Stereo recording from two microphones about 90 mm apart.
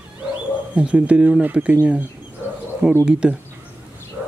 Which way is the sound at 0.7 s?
10° right (ahead or behind).